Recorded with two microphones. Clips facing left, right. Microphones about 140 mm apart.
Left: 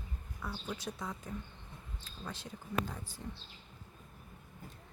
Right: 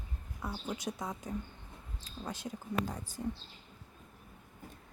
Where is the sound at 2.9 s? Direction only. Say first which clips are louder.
Right 4 dB; 40° right (ahead or behind).